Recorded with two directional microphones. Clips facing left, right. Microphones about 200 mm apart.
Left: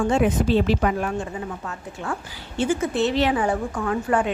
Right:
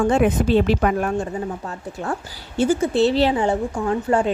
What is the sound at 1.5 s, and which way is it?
A woman's voice, 35° right (ahead or behind).